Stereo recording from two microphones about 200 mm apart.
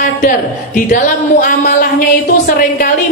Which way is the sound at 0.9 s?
40° left (ahead or behind).